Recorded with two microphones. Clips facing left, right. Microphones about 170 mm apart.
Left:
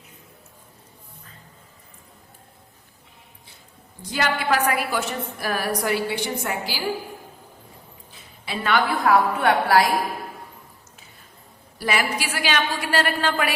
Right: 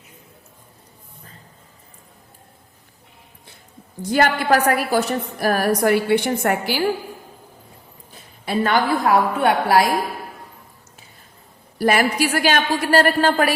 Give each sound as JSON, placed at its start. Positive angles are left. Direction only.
{"t": 4.1, "sound": "a woman's voice", "side_deg": -45}
{"t": 8.1, "sound": "a sound", "side_deg": -45}
{"t": 9.0, "sound": "a woman's voice", "side_deg": -25}
{"t": 11.8, "sound": "a woman's voice", "side_deg": -50}